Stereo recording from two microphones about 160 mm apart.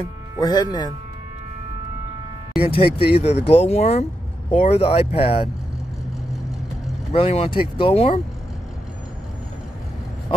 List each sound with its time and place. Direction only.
0.4 s speech: 25° left (ahead or behind)
2.6 s speech: 35° left (ahead or behind)
7.1 s speech: 40° left (ahead or behind)